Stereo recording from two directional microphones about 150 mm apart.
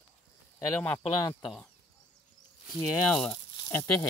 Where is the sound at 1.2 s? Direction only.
25° left (ahead or behind).